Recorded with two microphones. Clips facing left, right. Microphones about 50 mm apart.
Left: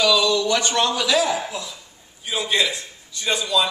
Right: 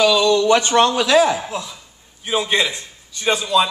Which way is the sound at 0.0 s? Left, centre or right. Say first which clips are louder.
Right 4 dB; right.